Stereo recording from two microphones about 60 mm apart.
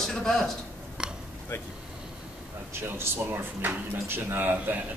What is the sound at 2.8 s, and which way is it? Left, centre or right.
Speech, right.